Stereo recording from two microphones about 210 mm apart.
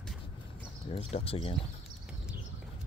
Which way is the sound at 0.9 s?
30° left (ahead or behind).